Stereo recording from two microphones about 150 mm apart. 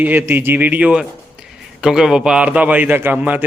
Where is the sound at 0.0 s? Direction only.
10° right (ahead or behind).